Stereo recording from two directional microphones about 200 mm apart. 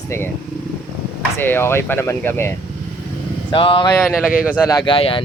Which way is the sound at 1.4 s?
10° left (ahead or behind).